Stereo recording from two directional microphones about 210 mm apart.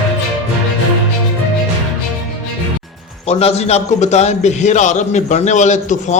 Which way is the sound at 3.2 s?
30° left (ahead or behind).